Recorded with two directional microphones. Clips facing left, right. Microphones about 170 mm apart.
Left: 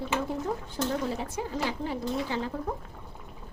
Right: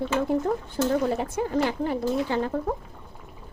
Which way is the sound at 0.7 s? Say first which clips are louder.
Right 7 dB; 55° right (ahead or behind).